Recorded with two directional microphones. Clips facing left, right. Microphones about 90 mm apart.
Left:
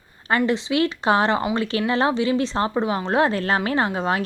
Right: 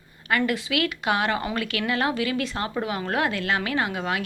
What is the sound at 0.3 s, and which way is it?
A woman's voice, 25° left (ahead or behind).